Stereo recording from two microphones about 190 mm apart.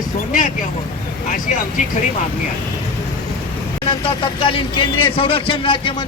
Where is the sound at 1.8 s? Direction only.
40° left (ahead or behind).